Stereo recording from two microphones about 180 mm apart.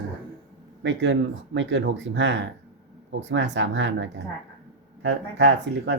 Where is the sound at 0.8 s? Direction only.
90° right.